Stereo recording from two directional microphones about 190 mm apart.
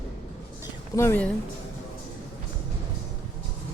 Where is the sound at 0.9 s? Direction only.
10° left (ahead or behind).